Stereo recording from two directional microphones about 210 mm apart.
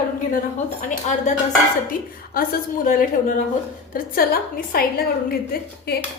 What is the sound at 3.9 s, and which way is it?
A woman's voice, 45° left (ahead or behind).